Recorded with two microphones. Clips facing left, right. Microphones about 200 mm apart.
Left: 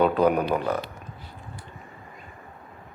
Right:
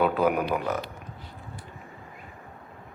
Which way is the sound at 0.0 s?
5° right (ahead or behind).